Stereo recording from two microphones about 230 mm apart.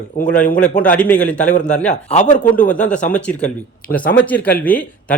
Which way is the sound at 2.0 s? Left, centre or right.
Left.